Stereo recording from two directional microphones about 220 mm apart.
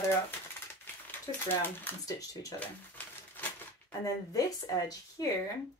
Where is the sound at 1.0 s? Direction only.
10° left (ahead or behind).